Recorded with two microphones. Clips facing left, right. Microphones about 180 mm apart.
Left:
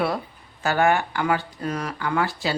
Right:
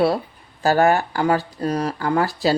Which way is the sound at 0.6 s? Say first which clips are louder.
Right 4 dB; 35° right (ahead or behind).